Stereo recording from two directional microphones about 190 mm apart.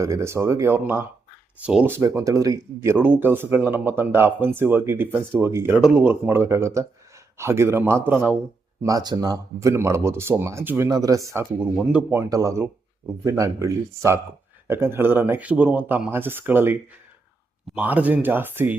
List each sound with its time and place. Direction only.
0.0 s speech: 15° right (ahead or behind)
12.3 s speech: 20° right (ahead or behind)
17.7 s speech: 10° right (ahead or behind)